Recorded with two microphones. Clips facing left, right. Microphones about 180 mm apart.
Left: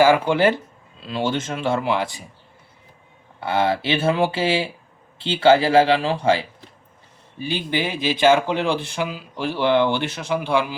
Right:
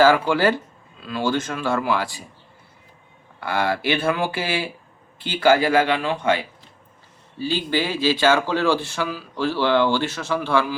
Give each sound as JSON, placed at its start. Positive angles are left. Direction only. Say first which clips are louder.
{"t": 0.0, "sound": "speech", "louder": "left 1 dB", "side_deg": 20}
{"t": 3.4, "sound": "speech", "louder": "left 2 dB", "side_deg": 25}
{"t": 7.3, "sound": "speech", "louder": "right 1 dB", "side_deg": 15}